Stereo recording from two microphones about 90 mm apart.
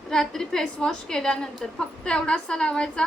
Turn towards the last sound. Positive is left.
turn(degrees=10)  # may be behind; listen again after turning